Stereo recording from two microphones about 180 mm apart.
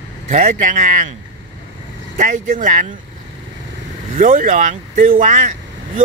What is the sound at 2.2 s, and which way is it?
Speech, 45° right (ahead or behind).